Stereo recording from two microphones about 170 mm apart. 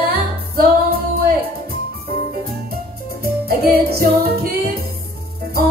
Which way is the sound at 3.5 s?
65° right (ahead or behind).